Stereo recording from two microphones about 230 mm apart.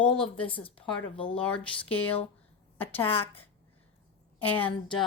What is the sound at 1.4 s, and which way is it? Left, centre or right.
A woman's voice, centre.